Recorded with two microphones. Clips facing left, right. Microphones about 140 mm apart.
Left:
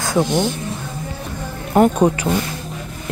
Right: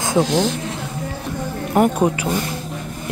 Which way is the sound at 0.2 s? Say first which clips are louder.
Even; 90° right.